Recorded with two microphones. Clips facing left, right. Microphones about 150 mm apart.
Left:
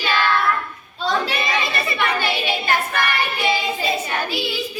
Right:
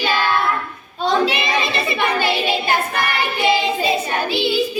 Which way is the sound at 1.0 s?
20° right (ahead or behind).